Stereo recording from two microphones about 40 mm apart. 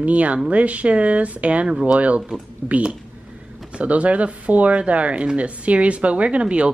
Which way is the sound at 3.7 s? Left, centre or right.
Right.